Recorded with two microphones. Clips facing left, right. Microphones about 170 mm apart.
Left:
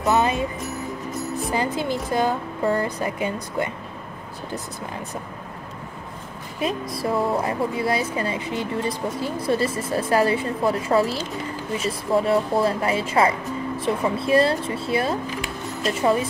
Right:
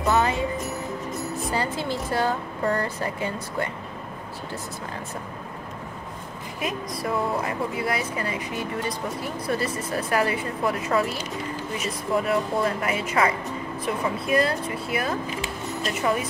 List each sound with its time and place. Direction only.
0.0 s music: 20° left (ahead or behind)
1.5 s speech: 15° left (ahead or behind)
6.6 s a woman's voice: 30° left (ahead or behind)